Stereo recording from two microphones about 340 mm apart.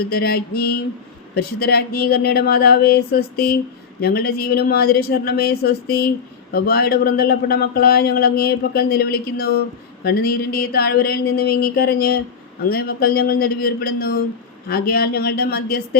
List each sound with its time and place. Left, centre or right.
0.1 s speech: left